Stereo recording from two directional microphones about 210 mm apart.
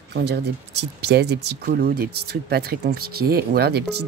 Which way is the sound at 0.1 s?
50° right (ahead or behind).